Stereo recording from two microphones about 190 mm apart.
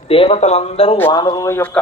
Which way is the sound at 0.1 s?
30° left (ahead or behind).